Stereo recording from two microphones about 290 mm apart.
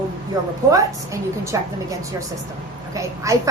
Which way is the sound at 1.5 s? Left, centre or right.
Centre.